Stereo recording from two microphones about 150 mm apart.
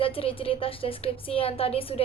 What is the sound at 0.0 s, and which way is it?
Speech, 35° left (ahead or behind).